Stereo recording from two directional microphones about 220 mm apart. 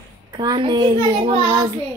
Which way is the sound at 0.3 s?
20° right (ahead or behind).